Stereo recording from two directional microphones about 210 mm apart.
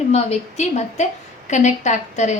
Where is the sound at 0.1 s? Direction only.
30° left (ahead or behind).